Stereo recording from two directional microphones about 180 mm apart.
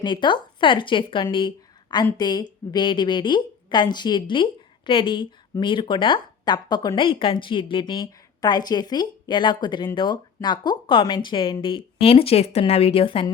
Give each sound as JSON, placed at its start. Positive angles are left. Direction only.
{"t": 0.0, "sound": "speech", "side_deg": 25}